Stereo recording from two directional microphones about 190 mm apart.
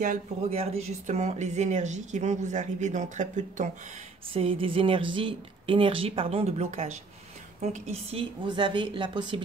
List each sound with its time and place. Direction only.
0.0 s speech: 35° right (ahead or behind)
4.3 s speech: 30° right (ahead or behind)